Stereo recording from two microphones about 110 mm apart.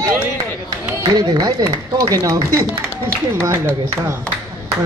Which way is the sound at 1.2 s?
35° right (ahead or behind).